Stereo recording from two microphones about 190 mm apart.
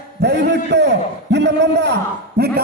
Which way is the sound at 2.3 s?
55° right (ahead or behind).